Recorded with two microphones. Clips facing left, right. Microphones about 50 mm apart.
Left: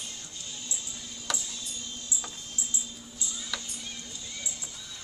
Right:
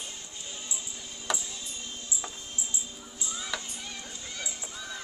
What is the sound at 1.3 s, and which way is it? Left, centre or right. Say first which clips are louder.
Music: right 2 dB; right.